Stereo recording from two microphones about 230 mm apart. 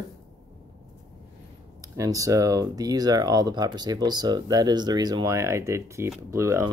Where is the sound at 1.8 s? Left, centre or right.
Centre.